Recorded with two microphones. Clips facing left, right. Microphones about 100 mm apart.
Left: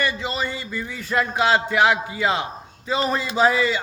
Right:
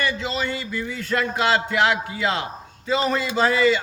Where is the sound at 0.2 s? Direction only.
10° left (ahead or behind).